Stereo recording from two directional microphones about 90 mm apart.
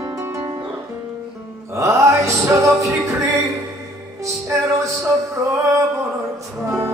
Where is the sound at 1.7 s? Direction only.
35° right (ahead or behind).